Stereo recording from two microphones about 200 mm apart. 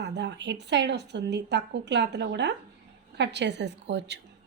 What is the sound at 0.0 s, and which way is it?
A woman's voice, 60° right (ahead or behind).